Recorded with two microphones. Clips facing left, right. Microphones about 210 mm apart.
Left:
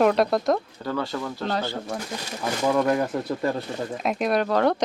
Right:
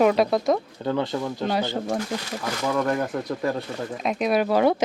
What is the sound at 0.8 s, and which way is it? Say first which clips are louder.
Speech: right 3 dB; 20° right (ahead or behind).